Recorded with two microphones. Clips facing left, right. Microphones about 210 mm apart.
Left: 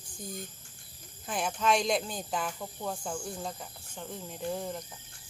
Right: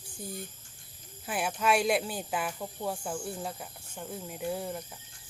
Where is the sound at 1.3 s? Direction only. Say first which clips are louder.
Even; 10° right (ahead or behind).